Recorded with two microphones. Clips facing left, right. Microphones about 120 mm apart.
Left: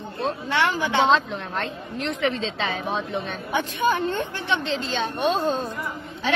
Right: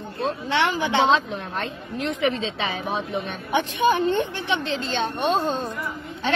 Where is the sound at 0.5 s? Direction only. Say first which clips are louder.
Right 1 dB; 20° right (ahead or behind).